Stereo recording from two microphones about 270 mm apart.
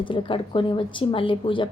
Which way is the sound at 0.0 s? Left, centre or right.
Centre.